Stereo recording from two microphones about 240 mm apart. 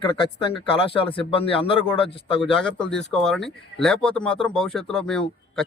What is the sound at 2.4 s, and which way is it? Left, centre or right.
Speech, centre.